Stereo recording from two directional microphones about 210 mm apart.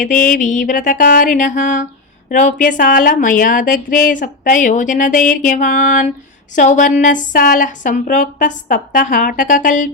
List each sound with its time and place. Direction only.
0.0 s speech: 40° left (ahead or behind)